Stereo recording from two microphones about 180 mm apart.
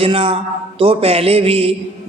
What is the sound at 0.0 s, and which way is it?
A man's voice, 35° right (ahead or behind).